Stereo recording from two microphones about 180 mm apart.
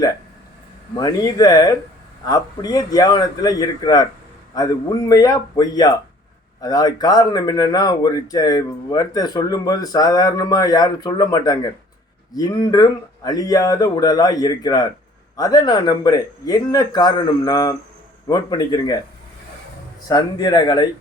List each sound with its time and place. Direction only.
0.9 s speech: 20° left (ahead or behind)
20.1 s speech: 20° left (ahead or behind)